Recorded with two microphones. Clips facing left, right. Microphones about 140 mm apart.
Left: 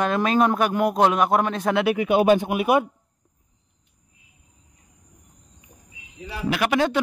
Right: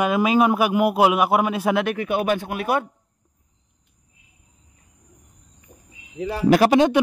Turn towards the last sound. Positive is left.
turn(degrees=-20)  # may be behind; listen again after turning